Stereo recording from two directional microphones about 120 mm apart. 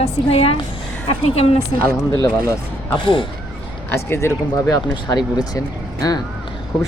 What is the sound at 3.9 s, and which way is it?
Speech, 20° left (ahead or behind).